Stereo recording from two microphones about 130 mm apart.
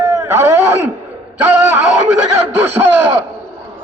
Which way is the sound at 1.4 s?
15° right (ahead or behind).